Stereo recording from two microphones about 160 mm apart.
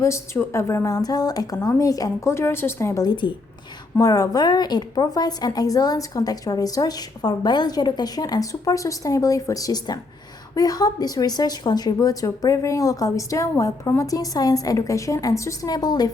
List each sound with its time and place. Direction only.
0.0 s a woman's voice: 15° left (ahead or behind)